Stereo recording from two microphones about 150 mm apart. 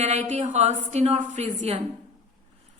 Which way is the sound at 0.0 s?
50° right (ahead or behind).